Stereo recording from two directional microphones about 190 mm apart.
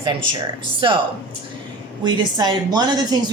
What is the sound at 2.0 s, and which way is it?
A woman's voice, 20° right (ahead or behind).